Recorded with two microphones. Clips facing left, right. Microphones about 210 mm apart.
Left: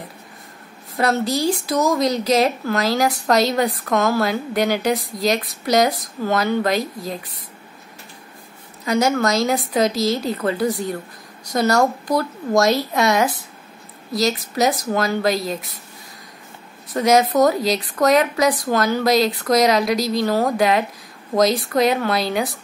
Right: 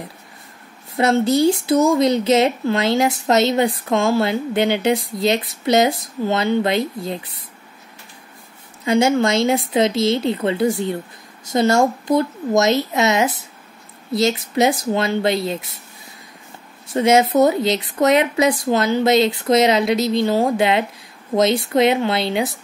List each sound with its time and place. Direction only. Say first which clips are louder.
0.9 s speech: right 4 dB; 25° right (ahead or behind)
8.8 s speech: right 2 dB; 25° right (ahead or behind)
16.9 s speech: right 1 dB; 25° right (ahead or behind)